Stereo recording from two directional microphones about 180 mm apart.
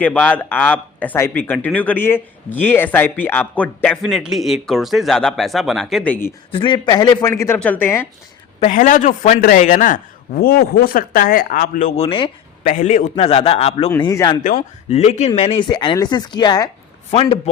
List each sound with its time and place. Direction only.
0.0 s speech: 10° left (ahead or behind)
6.5 s speech: 30° left (ahead or behind); by 8.0 s 10° left (ahead or behind)
8.6 s a man's voice: 45° left (ahead or behind)
11.9 s speech: 30° left (ahead or behind)
12.6 s a man's voice: 45° left (ahead or behind)
14.0 s speech: 20° left (ahead or behind)
14.8 s a man's voice: 35° left (ahead or behind)